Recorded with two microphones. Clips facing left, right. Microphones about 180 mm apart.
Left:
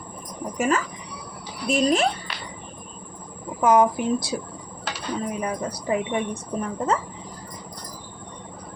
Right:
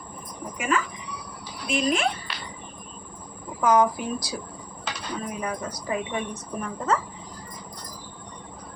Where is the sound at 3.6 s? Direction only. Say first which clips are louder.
Left 3 dB; 25° left (ahead or behind).